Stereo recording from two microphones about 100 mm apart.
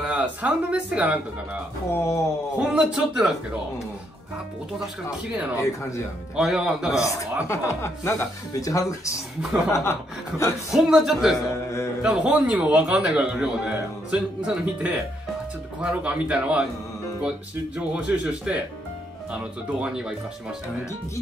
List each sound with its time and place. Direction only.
0.0 s a man's voice: 15° right (ahead or behind)
1.9 s speech: 30° left (ahead or behind)
2.6 s a man's voice: 10° right (ahead or behind)
5.6 s speech: 30° left (ahead or behind)
6.3 s a man's voice: 5° right (ahead or behind)
7.4 s speech: 30° left (ahead or behind)
9.4 s a man's voice: 10° right (ahead or behind)
10.7 s a man's voice: 5° right (ahead or behind)
11.5 s speech: 30° left (ahead or behind)
12.0 s a man's voice: 10° right (ahead or behind)
17.7 s a man's voice: 10° right (ahead or behind)